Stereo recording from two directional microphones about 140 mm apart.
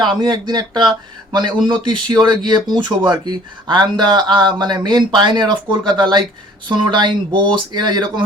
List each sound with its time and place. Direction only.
0.0 s speech: 30° right (ahead or behind)